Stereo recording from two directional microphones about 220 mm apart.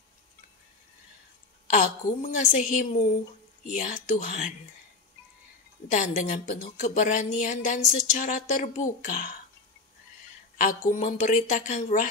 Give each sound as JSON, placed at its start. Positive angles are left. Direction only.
{"t": 1.7, "sound": "a woman's voice", "side_deg": 35}
{"t": 5.9, "sound": "a woman's voice", "side_deg": 35}
{"t": 10.6, "sound": "a woman's voice", "side_deg": 35}